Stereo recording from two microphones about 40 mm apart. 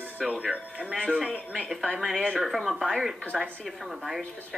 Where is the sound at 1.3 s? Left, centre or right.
Left.